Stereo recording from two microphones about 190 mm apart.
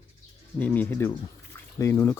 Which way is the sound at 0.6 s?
10° left (ahead or behind).